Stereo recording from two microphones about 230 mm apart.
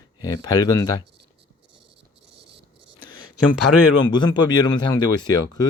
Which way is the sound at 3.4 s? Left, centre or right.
Left.